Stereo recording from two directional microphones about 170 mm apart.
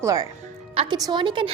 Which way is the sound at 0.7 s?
35° right (ahead or behind).